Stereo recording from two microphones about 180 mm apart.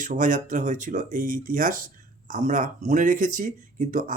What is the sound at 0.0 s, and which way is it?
Speech, 45° right (ahead or behind).